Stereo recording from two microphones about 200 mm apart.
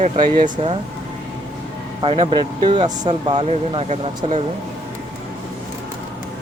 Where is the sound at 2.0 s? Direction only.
25° right (ahead or behind).